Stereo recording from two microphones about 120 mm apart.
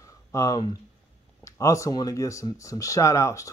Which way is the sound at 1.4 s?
25° left (ahead or behind).